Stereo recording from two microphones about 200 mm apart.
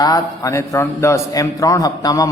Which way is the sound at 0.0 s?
15° left (ahead or behind).